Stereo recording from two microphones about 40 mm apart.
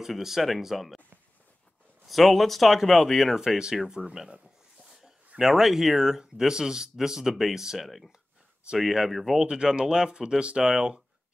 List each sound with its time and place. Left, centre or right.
0.0 s speech: centre
2.0 s speech: centre
5.4 s speech: centre
9.5 s speech: right